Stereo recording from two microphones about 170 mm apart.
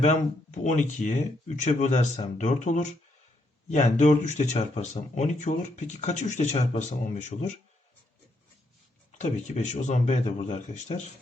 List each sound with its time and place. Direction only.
0.0 s speech: 45° left (ahead or behind)
9.1 s speech: 45° left (ahead or behind)